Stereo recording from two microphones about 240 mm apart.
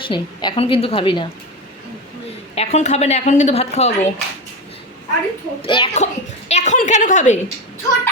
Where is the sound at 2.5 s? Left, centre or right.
Left.